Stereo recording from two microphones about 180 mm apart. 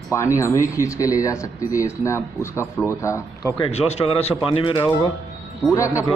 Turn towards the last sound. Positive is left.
turn(degrees=15)  # may be behind; listen again after turning